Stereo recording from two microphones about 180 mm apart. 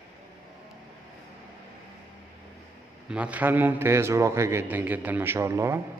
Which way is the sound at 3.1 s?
5° right (ahead or behind).